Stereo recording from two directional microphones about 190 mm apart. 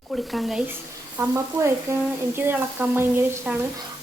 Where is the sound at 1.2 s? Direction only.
15° right (ahead or behind).